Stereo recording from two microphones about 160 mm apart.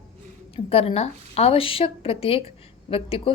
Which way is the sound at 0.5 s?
35° left (ahead or behind).